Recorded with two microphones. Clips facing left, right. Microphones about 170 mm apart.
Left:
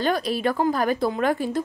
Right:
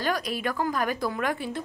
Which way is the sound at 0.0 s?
30° left (ahead or behind).